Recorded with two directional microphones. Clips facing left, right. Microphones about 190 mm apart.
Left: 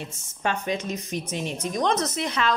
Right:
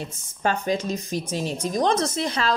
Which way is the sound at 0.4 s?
40° right (ahead or behind).